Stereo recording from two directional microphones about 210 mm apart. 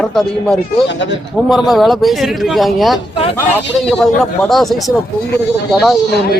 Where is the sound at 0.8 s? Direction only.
55° left (ahead or behind).